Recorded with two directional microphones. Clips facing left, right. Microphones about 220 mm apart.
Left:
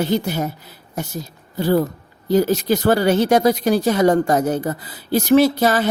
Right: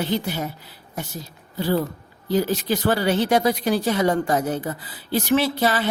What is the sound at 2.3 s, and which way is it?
Speech, 45° left (ahead or behind).